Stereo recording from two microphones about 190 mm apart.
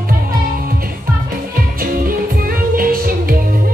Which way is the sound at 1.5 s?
50° right (ahead or behind).